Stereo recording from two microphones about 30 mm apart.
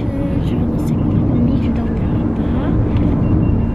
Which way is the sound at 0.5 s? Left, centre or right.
Centre.